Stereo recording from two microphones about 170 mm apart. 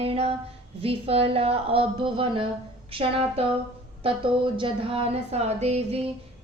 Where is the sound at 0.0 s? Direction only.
35° right (ahead or behind).